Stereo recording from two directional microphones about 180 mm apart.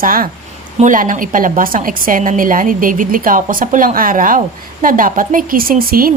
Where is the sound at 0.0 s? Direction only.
50° right (ahead or behind).